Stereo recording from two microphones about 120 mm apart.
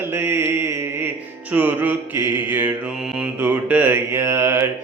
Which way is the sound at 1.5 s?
15° right (ahead or behind).